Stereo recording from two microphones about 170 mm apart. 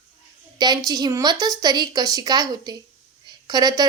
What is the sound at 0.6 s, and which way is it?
Speech, 25° right (ahead or behind).